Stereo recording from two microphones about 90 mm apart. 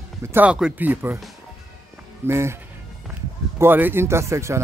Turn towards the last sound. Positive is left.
turn(degrees=-35)  # may be behind; listen again after turning